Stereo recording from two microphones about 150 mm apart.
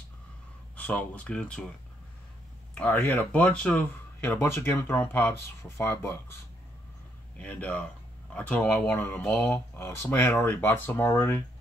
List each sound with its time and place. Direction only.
0.7 s speech: 10° left (ahead or behind)
2.7 s speech: 10° left (ahead or behind)
4.2 s speech: 15° left (ahead or behind)
7.3 s speech: 10° left (ahead or behind)